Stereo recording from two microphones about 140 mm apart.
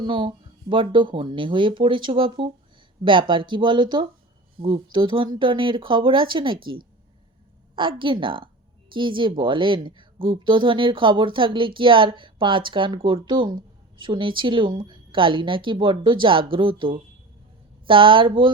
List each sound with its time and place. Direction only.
0.0 s a woman's voice: 35° right (ahead or behind)
7.8 s a woman's voice: 35° right (ahead or behind)